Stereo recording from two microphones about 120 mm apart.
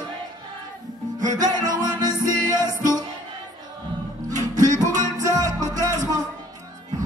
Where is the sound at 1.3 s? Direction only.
30° right (ahead or behind).